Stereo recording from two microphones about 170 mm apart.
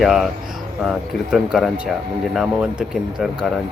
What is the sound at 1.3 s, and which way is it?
Speech, centre (ahead or behind).